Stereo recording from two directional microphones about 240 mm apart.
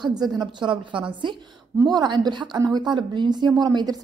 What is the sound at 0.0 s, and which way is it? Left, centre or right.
A woman's voice, centre.